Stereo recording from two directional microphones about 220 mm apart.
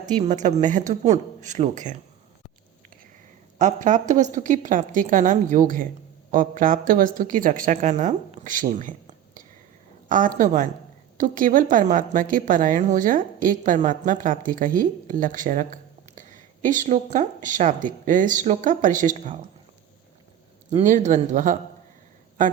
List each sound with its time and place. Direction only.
0.2 s a woman's voice: 30° right (ahead or behind)
3.6 s a woman's voice: 35° right (ahead or behind)
20.7 s a woman's voice: 35° right (ahead or behind)